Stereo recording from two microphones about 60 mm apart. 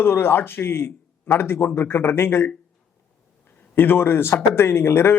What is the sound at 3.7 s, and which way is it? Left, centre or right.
A man's voice, left.